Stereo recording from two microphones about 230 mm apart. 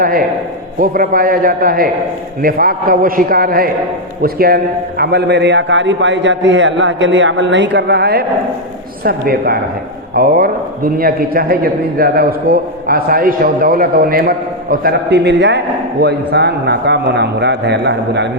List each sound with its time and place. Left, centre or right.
0.0 s a man's voice: right